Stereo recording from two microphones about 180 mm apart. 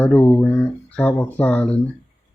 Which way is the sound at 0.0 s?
10° left (ahead or behind).